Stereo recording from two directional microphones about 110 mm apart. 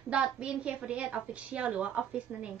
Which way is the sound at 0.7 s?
10° right (ahead or behind).